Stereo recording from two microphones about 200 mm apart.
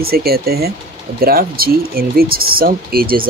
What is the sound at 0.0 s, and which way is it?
Speech, 50° right (ahead or behind).